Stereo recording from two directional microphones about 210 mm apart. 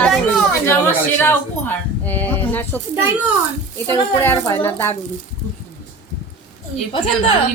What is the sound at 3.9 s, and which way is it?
A woman's voice, 10° left (ahead or behind).